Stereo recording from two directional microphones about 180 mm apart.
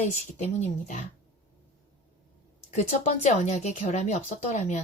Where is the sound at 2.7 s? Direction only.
40° left (ahead or behind).